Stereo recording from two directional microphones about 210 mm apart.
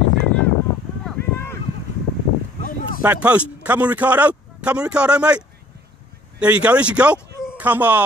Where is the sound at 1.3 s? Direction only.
10° left (ahead or behind).